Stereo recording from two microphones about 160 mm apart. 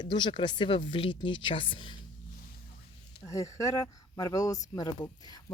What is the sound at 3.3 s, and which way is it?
Speech, 20° left (ahead or behind).